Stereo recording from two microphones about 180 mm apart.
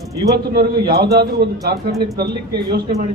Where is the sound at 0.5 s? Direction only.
60° right (ahead or behind).